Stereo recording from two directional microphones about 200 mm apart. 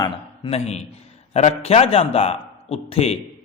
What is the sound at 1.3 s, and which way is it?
A man's voice, 30° left (ahead or behind).